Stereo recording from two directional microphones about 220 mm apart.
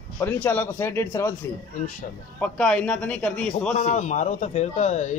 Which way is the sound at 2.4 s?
5° left (ahead or behind).